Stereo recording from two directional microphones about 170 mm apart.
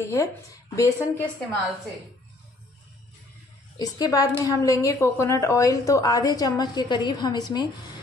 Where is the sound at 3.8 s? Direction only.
25° left (ahead or behind).